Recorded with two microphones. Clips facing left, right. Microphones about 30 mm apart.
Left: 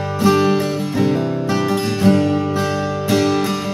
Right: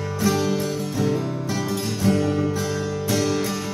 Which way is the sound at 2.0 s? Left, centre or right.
Left.